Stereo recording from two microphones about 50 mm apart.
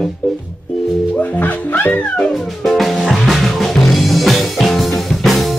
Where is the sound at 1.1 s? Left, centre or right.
Left.